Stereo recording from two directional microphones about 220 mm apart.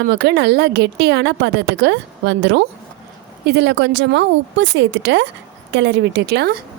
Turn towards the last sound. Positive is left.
turn(degrees=-45)  # may be behind; listen again after turning